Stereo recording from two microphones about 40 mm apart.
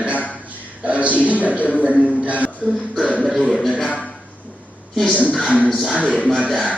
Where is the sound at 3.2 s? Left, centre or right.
Centre.